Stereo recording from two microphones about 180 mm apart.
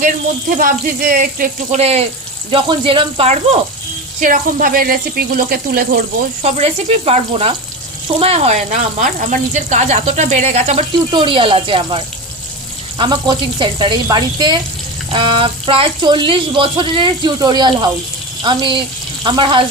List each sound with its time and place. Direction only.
0.5 s speech: 50° right (ahead or behind)
1.8 s speech: 35° right (ahead or behind)
4.2 s speech: 50° right (ahead or behind)
6.4 s speech: 35° right (ahead or behind)